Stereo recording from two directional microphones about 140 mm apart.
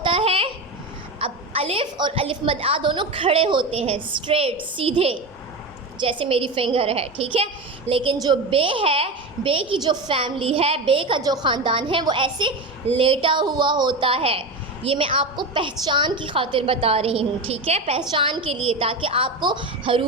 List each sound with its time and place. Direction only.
0.0 s a sound: 40° right (ahead or behind)
1.2 s a woman's voice: 45° right (ahead or behind)
18.0 s a woman's voice: 35° right (ahead or behind)